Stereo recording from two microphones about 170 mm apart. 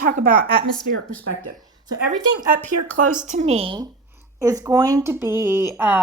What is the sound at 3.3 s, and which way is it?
Speech, 40° right (ahead or behind).